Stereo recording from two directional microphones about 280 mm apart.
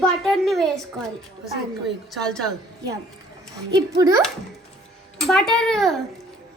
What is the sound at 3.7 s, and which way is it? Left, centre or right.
Speech, centre.